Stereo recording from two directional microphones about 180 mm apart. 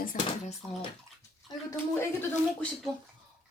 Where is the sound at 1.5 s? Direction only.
25° left (ahead or behind).